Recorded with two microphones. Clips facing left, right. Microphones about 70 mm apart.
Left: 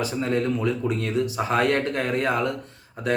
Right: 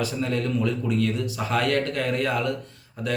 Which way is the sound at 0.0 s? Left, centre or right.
Left.